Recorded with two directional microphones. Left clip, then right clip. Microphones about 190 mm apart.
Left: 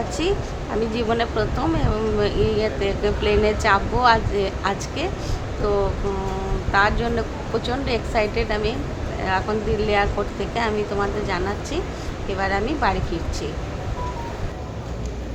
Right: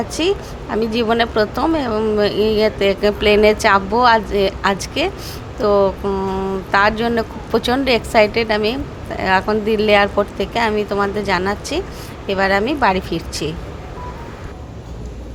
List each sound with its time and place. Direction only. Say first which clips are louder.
0.2 s a woman's voice: right 6 dB; 20° right (ahead or behind)